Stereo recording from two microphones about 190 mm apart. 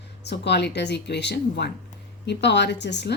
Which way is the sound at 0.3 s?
60° left (ahead or behind).